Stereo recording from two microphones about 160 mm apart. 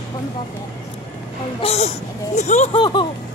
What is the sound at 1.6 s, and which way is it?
Speech, 40° left (ahead or behind).